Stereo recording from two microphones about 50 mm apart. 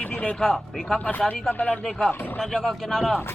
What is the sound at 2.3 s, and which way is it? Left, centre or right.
Speech, centre.